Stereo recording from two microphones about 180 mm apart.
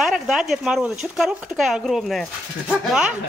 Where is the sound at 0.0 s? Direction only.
5° right (ahead or behind).